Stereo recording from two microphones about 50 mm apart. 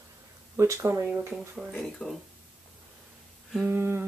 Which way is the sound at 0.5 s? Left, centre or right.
Right.